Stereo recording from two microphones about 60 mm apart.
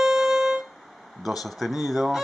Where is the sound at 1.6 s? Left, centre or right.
Centre.